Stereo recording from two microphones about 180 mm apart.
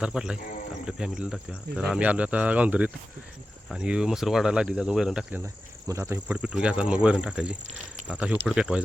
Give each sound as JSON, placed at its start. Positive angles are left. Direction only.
{"t": 0.0, "sound": "speech", "side_deg": -5}
{"t": 5.9, "sound": "speech", "side_deg": -15}
{"t": 6.1, "sound": "speech", "side_deg": -5}